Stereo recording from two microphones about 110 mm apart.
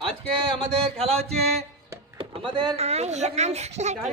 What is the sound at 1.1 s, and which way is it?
Mantra, 70° right (ahead or behind).